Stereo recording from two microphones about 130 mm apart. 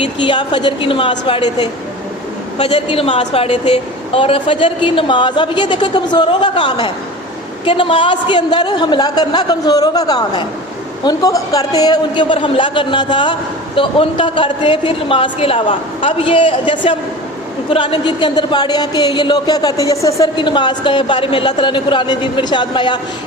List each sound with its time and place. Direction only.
0.0 s speech: 40° left (ahead or behind)
2.6 s a woman's voice: 50° left (ahead or behind)